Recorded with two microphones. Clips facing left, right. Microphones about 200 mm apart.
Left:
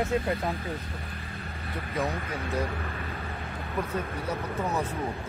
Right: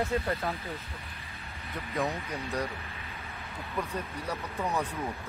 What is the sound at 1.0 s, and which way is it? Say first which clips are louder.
Vehicle: left 7 dB; 50° left (ahead or behind).